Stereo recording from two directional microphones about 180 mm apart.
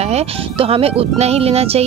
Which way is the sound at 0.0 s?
35° right (ahead or behind).